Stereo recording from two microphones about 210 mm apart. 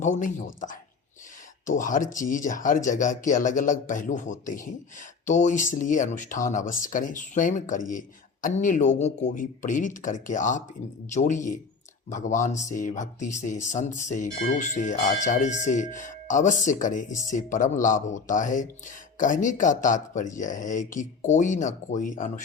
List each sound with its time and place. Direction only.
0.0 s speech: 35° left (ahead or behind)
1.6 s speech: 40° left (ahead or behind)